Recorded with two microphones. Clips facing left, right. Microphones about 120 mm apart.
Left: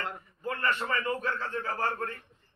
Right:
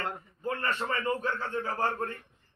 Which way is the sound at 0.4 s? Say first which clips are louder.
Left 1 dB; 20° right (ahead or behind).